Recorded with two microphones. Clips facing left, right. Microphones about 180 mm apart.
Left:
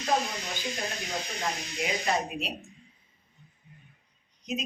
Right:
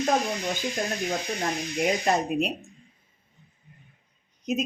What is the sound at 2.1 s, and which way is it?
Speech, 50° right (ahead or behind).